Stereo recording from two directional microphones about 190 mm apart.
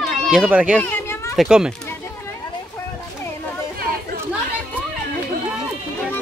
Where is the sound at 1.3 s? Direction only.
5° right (ahead or behind).